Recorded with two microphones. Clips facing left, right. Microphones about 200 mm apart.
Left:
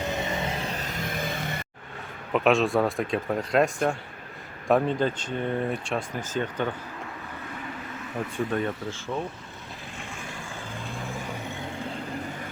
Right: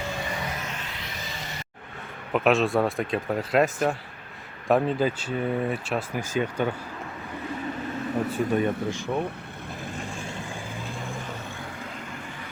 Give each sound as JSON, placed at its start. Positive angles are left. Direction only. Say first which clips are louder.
{"t": 0.2, "sound": "music", "louder": "left 3 dB", "side_deg": 25}
{"t": 2.3, "sound": "speech", "louder": "even", "side_deg": 0}
{"t": 8.3, "sound": "speech", "louder": "right 2 dB", "side_deg": -10}